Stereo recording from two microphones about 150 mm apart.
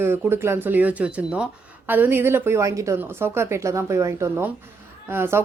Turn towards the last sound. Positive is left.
turn(degrees=-15)  # may be behind; listen again after turning